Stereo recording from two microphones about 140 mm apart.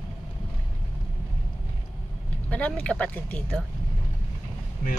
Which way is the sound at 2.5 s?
10° left (ahead or behind).